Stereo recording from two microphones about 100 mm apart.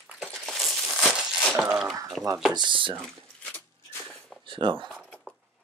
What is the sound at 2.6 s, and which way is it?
Speech, 55° right (ahead or behind).